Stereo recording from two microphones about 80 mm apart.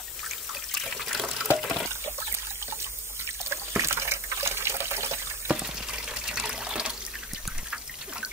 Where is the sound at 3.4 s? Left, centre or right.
Right.